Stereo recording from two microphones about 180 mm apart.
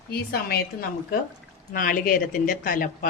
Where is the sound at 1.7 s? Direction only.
50° left (ahead or behind).